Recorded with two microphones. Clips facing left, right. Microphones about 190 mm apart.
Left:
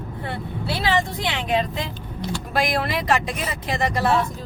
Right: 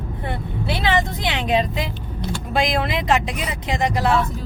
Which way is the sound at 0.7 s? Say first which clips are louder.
Right 1 dB; 20° right (ahead or behind).